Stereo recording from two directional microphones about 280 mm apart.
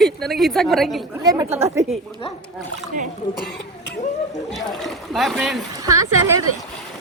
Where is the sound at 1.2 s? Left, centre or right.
Centre.